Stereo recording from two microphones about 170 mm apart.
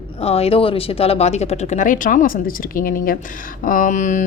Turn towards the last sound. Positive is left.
turn(degrees=45)  # may be behind; listen again after turning